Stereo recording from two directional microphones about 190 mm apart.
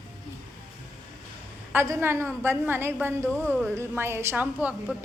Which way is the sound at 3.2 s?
10° left (ahead or behind).